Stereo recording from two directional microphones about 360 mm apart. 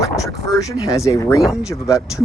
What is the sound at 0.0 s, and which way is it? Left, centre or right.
Speech, centre.